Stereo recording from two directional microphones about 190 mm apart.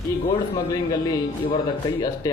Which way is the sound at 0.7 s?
20° left (ahead or behind).